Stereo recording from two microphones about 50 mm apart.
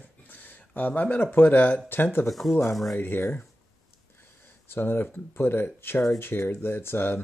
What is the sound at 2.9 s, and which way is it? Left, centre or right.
Speech, left.